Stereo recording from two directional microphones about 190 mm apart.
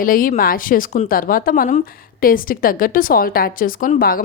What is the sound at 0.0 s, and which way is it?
Speech, 45° left (ahead or behind).